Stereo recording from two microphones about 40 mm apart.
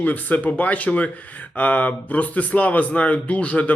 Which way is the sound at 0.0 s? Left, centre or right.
Left.